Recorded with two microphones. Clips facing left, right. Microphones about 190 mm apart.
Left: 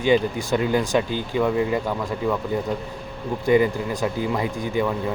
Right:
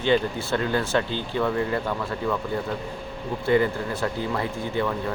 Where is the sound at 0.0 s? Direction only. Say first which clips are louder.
Left 3 dB; 15° left (ahead or behind).